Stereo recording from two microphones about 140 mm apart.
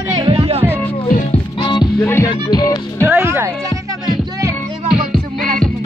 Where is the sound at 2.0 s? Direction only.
20° left (ahead or behind).